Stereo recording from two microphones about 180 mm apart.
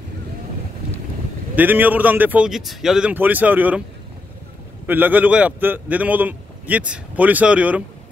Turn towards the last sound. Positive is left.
turn(degrees=-5)  # may be behind; listen again after turning